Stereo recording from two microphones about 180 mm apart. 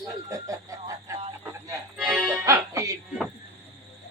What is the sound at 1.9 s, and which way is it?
Music, centre (ahead or behind).